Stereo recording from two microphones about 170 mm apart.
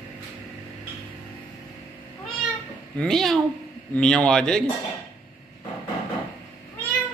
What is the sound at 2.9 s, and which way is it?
Speech, 5° left (ahead or behind).